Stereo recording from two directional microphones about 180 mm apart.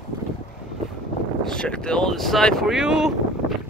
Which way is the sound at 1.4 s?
5° left (ahead or behind).